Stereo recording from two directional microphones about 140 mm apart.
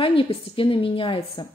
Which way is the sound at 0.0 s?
40° left (ahead or behind).